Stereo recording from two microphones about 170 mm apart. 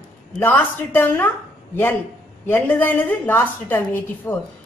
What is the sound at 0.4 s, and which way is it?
Speech, 10° left (ahead or behind).